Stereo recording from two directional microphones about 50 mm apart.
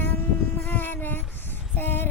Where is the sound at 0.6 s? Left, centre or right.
Left.